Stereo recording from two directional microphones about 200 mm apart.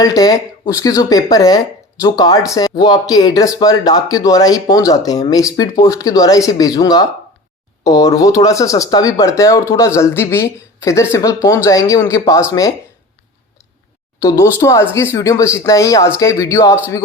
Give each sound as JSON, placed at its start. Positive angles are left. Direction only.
{"t": 0.0, "sound": "speech", "side_deg": 20}
{"t": 14.2, "sound": "speech", "side_deg": 15}